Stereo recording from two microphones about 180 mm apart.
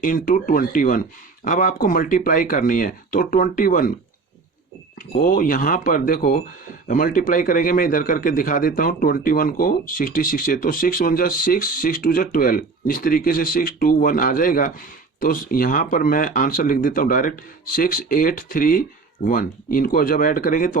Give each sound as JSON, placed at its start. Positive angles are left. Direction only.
{"t": 0.0, "sound": "a man's voice", "side_deg": 50}
{"t": 5.1, "sound": "a man's voice", "side_deg": 50}